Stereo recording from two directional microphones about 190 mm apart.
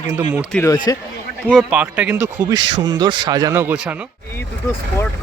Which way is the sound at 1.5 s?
5° right (ahead or behind).